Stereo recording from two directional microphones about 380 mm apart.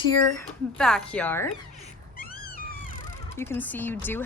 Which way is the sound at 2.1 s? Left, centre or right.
Left.